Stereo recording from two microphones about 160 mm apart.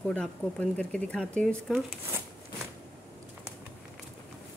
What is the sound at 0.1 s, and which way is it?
Speech, 5° left (ahead or behind).